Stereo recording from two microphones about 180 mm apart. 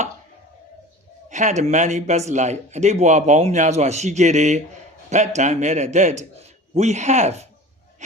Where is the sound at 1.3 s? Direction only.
40° right (ahead or behind).